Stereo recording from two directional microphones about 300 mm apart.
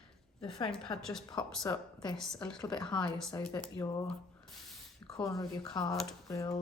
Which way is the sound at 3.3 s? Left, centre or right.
Centre.